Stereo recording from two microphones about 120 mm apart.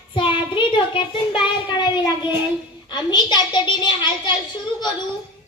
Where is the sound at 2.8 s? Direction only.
35° left (ahead or behind).